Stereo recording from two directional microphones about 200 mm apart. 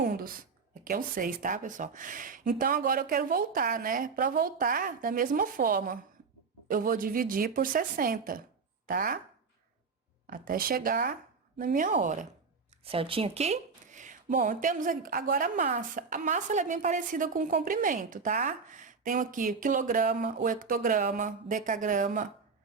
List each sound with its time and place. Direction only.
0.0 s speech: 45° right (ahead or behind)
10.2 s speech: 45° right (ahead or behind)
12.8 s speech: 30° right (ahead or behind)